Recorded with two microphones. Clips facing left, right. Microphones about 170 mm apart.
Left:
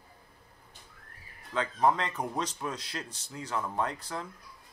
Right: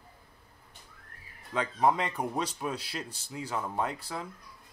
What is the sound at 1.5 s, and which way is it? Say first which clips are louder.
Speech: even; 10° right (ahead or behind).